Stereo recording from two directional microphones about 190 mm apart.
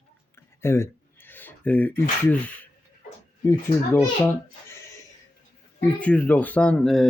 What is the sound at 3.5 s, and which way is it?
Speech, 15° left (ahead or behind).